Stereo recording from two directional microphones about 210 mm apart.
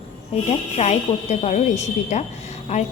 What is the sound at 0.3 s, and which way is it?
A woman's voice, 30° left (ahead or behind).